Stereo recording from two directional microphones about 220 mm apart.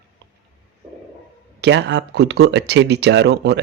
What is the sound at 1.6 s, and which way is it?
Speech, 50° right (ahead or behind).